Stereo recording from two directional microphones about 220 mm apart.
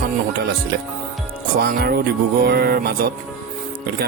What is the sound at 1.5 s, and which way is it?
Speech, 45° right (ahead or behind).